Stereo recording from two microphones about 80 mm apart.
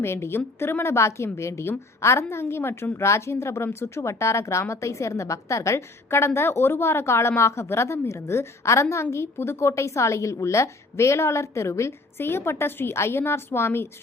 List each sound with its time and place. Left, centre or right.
0.0 s a woman's voice: left